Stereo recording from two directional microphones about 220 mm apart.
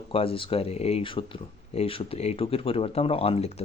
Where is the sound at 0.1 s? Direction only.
25° left (ahead or behind).